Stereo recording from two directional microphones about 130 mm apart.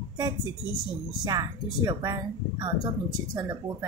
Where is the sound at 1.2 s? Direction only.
25° right (ahead or behind).